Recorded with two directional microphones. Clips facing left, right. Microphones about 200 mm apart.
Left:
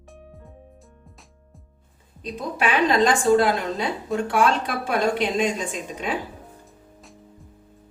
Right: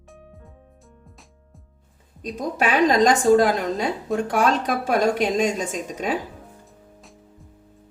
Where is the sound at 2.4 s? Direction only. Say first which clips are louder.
Right 2 dB; 40° right (ahead or behind).